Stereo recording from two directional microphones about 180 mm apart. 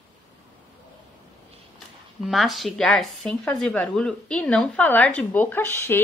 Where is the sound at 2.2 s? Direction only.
Centre (ahead or behind).